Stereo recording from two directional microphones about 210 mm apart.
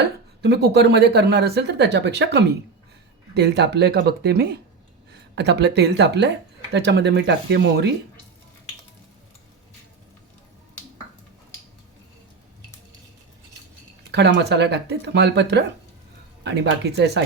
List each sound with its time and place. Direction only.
0.0 s speech: 50° right (ahead or behind)
14.1 s speech: 55° right (ahead or behind)